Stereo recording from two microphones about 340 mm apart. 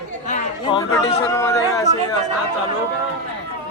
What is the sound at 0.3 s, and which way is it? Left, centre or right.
Chatter, centre.